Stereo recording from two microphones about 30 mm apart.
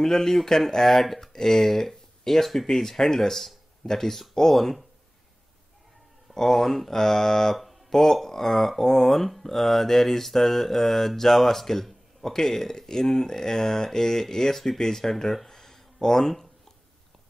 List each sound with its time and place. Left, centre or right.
0.0 s speech: centre
6.3 s speech: centre
15.4 s a sound: centre